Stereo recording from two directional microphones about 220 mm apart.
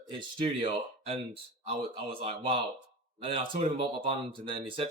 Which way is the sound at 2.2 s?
25° right (ahead or behind).